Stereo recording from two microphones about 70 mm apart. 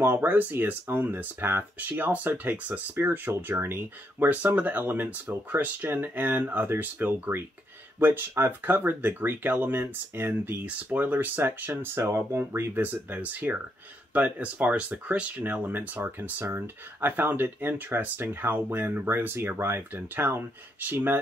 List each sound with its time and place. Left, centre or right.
0.0 s speech: right
4.3 s speech: right
10.6 s speech: right
12.8 s speech: right